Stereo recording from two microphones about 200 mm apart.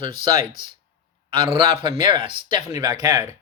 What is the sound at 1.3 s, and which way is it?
Speech, 25° right (ahead or behind).